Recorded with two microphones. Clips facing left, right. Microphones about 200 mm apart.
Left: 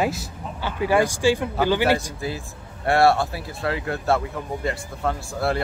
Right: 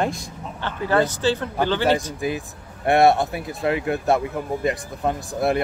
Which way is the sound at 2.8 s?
20° right (ahead or behind).